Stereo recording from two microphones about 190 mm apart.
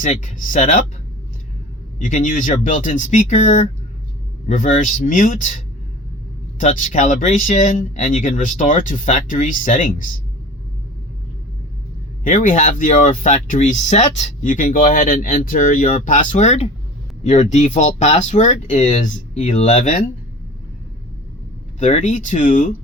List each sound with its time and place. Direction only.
0.0 s speech: 40° left (ahead or behind)
2.0 s speech: 45° left (ahead or behind)
6.6 s speech: 40° left (ahead or behind)
12.2 s speech: 45° left (ahead or behind)
21.8 s speech: 40° left (ahead or behind)